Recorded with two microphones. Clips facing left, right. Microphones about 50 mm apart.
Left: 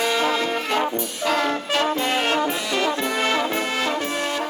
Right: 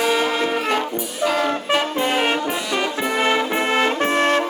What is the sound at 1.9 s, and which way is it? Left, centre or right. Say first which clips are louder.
Brass instrument: right 2 dB; centre.